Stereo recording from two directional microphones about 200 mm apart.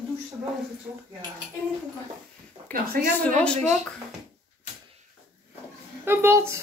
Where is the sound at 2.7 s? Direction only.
10° left (ahead or behind).